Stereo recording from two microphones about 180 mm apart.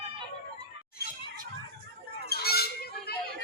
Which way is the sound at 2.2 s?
60° left (ahead or behind).